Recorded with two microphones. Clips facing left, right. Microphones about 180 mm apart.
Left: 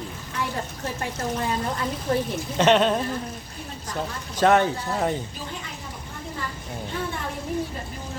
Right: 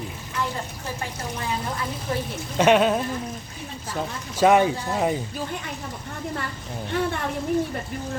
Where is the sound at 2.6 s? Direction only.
10° right (ahead or behind).